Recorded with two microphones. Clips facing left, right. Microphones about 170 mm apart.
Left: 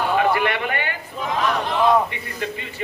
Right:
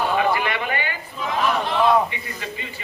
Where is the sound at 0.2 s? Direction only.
60° left (ahead or behind).